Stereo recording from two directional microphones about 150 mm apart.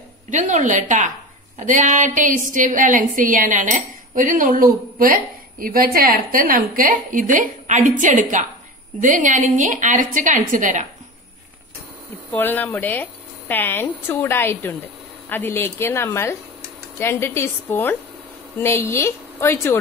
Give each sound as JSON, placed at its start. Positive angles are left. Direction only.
{"t": 0.3, "sound": "a woman's voice", "side_deg": -55}
{"t": 12.3, "sound": "speech", "side_deg": 15}